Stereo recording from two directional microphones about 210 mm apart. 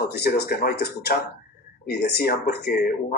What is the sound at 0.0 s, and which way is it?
Speech, 50° left (ahead or behind).